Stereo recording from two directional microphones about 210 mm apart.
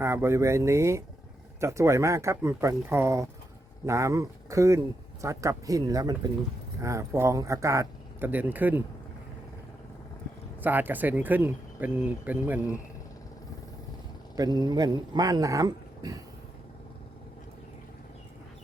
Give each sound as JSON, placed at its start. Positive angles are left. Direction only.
{"t": 0.0, "sound": "speech", "side_deg": -10}
{"t": 10.6, "sound": "speech", "side_deg": -10}
{"t": 14.3, "sound": "speech", "side_deg": -20}